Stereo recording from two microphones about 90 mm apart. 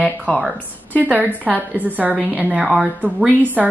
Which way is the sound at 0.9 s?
20° right (ahead or behind).